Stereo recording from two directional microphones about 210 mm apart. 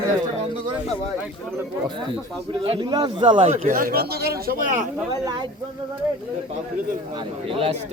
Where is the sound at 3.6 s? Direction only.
40° right (ahead or behind).